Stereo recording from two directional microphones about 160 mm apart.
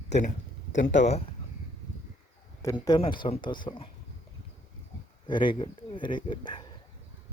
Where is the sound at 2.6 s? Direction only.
20° left (ahead or behind).